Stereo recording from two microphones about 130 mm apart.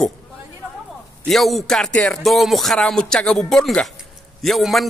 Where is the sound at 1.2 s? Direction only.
Centre (ahead or behind).